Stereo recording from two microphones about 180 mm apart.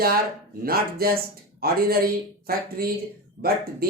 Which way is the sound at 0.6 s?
55° right (ahead or behind).